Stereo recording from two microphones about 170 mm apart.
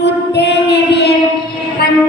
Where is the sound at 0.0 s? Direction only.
90° left.